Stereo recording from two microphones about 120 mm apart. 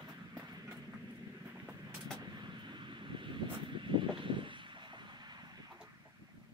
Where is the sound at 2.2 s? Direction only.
40° right (ahead or behind).